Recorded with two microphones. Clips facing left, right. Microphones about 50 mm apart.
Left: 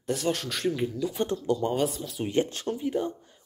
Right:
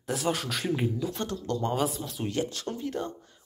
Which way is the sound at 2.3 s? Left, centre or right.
Left.